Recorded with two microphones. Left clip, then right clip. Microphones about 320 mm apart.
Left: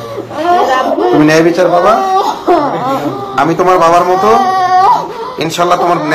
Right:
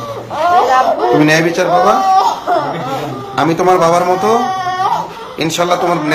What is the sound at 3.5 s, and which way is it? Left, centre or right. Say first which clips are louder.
Speech: left 3 dB; centre.